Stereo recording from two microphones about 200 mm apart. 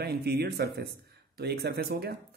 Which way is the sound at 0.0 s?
55° right (ahead or behind).